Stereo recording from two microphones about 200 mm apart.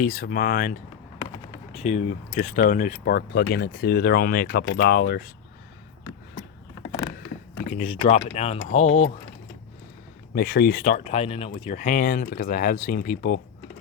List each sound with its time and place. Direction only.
0.0 s speech: 45° left (ahead or behind)
1.7 s speech: 35° left (ahead or behind)
7.7 s speech: 35° left (ahead or behind)
10.3 s speech: 50° left (ahead or behind)